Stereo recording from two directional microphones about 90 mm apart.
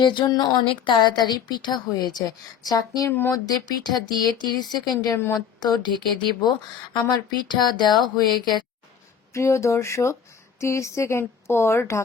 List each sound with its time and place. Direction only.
0.0 s a woman's voice: 60° left (ahead or behind)
3.1 s speech: 25° left (ahead or behind)
3.3 s speech: 45° left (ahead or behind)
5.1 s speech: 30° left (ahead or behind)
5.5 s speech: 50° left (ahead or behind)
7.1 s a woman's voice: 55° left (ahead or behind)
9.3 s speech: 35° left (ahead or behind)